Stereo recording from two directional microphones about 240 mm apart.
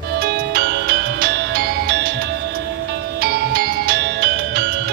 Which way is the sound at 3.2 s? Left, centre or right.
Right.